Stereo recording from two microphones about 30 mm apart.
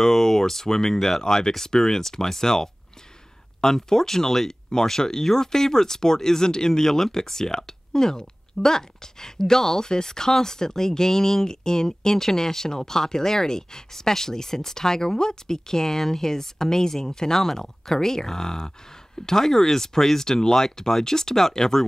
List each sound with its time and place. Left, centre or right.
0.0 s speech: centre
1.2 s speech: left